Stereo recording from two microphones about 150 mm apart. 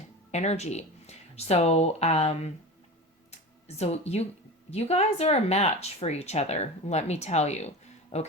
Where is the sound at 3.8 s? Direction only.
45° left (ahead or behind).